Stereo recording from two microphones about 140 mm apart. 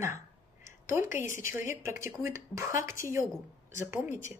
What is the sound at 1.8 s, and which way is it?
Speech, 20° right (ahead or behind).